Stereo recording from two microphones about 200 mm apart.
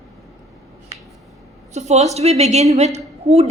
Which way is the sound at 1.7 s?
35° right (ahead or behind).